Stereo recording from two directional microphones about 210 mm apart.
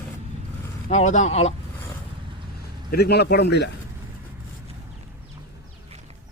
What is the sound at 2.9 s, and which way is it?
Speech, 50° left (ahead or behind).